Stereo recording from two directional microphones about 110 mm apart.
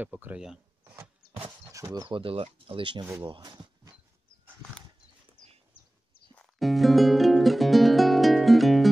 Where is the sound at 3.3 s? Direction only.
40° right (ahead or behind).